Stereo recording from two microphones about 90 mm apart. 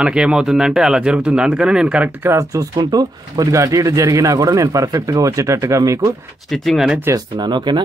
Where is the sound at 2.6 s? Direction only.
50° right (ahead or behind).